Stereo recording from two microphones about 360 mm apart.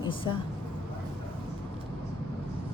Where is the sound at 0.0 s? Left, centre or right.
Centre.